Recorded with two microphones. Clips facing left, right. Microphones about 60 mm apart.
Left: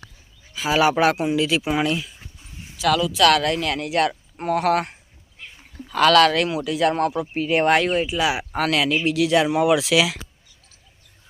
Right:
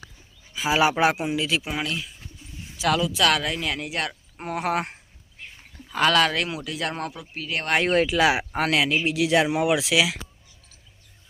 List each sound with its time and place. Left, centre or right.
0.5 s speech: centre
1.5 s speech: centre
2.7 s speech: right
3.2 s speech: centre
5.9 s speech: centre
7.3 s speech: left
7.9 s speech: right
8.2 s speech: right
8.5 s speech: right; by 10.2 s centre